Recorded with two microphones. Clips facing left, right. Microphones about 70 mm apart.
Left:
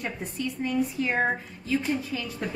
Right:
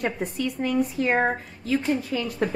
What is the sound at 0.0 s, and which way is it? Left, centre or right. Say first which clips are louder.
A woman's voice: right 5 dB; right.